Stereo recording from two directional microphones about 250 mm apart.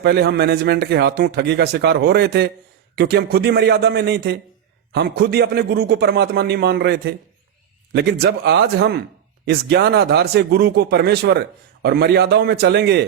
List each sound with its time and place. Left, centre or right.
0.0 s speech: right